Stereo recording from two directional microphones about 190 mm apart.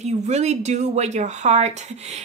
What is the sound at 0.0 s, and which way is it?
Speech, 35° right (ahead or behind).